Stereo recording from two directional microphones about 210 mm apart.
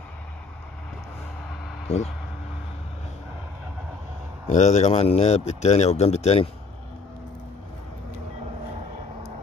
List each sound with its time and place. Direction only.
1.9 s speech: 30° left (ahead or behind)
4.5 s a man's voice: 35° left (ahead or behind)